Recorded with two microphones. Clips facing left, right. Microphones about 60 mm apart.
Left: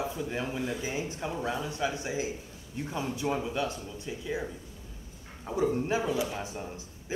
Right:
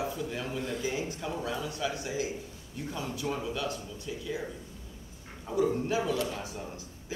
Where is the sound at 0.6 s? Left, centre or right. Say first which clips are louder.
Left 1 dB; centre.